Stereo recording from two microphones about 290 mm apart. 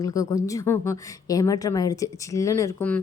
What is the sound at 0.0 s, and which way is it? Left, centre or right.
A woman's voice, centre.